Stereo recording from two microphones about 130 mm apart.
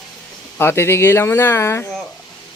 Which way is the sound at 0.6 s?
20° left (ahead or behind).